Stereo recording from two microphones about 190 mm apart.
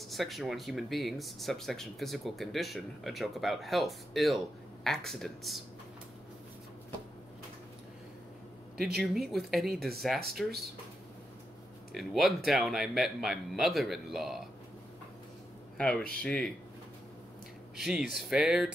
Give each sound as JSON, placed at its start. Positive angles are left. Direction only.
{"t": 0.1, "sound": "speech", "side_deg": 0}
{"t": 8.7, "sound": "speech", "side_deg": -55}
{"t": 9.0, "sound": "speech", "side_deg": 0}
{"t": 11.9, "sound": "speech", "side_deg": 0}
{"t": 16.2, "sound": "speech", "side_deg": 5}
{"t": 17.7, "sound": "speech", "side_deg": -5}